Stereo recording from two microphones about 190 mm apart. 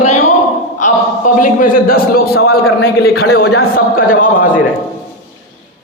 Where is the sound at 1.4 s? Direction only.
45° left (ahead or behind).